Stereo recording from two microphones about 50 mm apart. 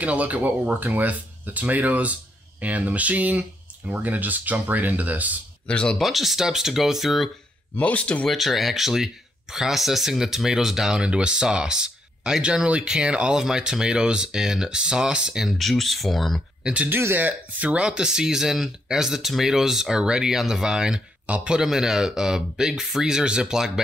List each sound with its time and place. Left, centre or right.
0.0 s speech: right
5.7 s speech: left
5.9 s speech: centre
7.8 s speech: left
8.3 s speech: centre
11.0 s speech: right
15.5 s speech: centre
16.9 s speech: right
17.8 s speech: centre